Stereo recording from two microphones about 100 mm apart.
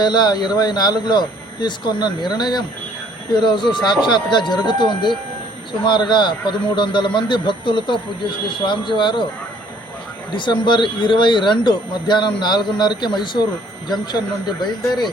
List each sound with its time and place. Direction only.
0.0 s speech: 45° left (ahead or behind)
10.3 s speech: 55° left (ahead or behind)
14.6 s speech: 50° left (ahead or behind)